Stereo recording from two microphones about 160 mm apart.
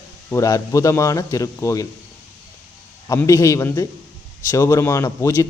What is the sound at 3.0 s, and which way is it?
A man's voice, 20° left (ahead or behind).